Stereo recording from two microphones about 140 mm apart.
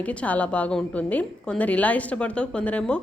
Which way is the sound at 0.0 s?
10° left (ahead or behind).